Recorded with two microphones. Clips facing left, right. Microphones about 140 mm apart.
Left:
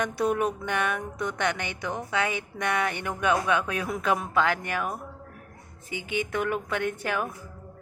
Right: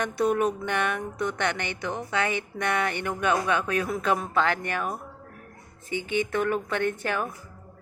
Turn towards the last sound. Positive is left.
turn(degrees=10)  # may be behind; listen again after turning